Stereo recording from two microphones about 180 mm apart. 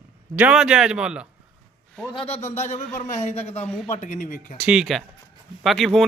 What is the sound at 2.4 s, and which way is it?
Speech, 40° left (ahead or behind).